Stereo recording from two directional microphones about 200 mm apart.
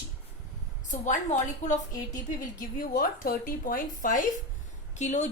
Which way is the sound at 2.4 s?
45° left (ahead or behind).